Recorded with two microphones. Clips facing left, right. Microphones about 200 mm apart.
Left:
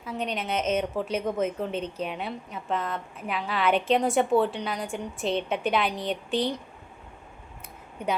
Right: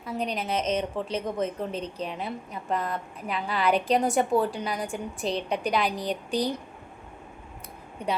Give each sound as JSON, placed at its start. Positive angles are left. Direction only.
{"t": 0.0, "sound": "a woman's voice", "side_deg": 0}
{"t": 1.7, "sound": "a woman's voice", "side_deg": -35}
{"t": 2.0, "sound": "a woman's voice", "side_deg": 0}